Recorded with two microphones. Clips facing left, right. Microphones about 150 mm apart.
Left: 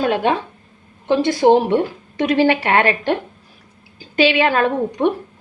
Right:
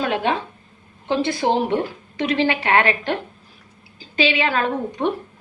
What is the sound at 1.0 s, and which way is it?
A woman's voice, 50° left (ahead or behind).